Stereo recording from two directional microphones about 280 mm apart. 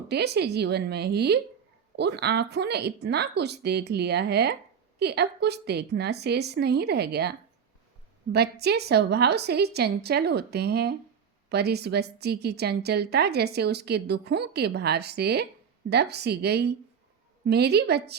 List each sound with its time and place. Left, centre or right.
0.1 s a woman's voice: right